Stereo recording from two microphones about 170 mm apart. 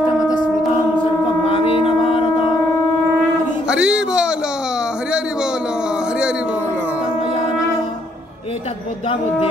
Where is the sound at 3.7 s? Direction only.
5° right (ahead or behind).